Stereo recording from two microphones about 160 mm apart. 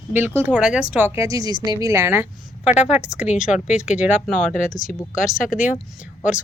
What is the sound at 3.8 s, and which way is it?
Speech, 10° right (ahead or behind).